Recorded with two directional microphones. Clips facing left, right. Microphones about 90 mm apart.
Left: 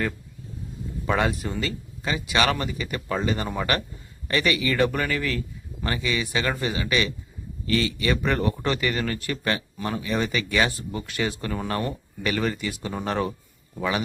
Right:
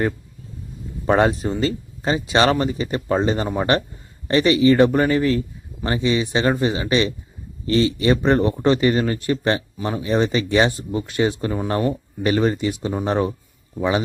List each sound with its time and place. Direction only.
1.0 s speech: 35° right (ahead or behind)